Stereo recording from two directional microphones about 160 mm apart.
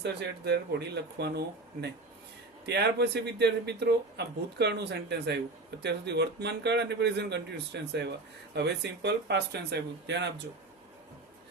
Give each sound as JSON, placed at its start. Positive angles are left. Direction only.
{"t": 0.0, "sound": "a man's voice", "side_deg": -90}